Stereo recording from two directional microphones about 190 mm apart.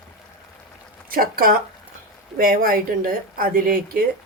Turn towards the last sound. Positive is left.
turn(degrees=-50)  # may be behind; listen again after turning